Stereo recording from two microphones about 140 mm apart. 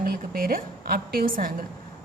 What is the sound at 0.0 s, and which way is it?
A woman's voice, 90° right.